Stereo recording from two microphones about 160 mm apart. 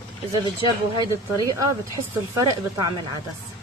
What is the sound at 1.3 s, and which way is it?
Speech, 20° right (ahead or behind).